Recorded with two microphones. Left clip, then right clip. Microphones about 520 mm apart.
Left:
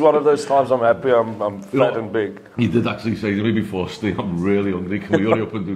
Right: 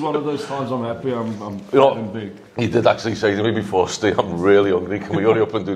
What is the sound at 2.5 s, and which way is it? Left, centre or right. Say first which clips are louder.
Speech: right 6 dB; right.